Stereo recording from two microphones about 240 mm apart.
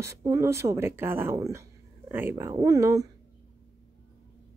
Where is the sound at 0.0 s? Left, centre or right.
Centre.